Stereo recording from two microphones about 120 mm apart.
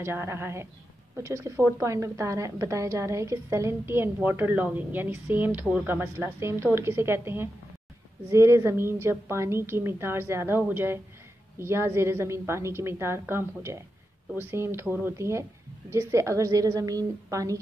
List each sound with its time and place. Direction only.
0.0 s a woman's voice: 20° right (ahead or behind)